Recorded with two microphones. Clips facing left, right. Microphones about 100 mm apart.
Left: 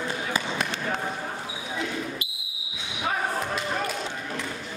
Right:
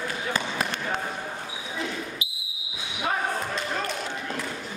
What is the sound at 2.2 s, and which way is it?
Basketball bounce, 55° left (ahead or behind).